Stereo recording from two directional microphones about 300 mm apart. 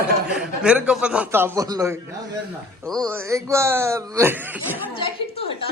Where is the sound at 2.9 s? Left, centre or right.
Centre.